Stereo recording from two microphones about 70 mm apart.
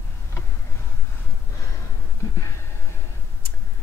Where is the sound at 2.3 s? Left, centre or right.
Left.